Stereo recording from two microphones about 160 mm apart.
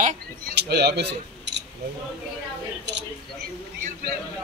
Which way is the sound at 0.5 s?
90° right.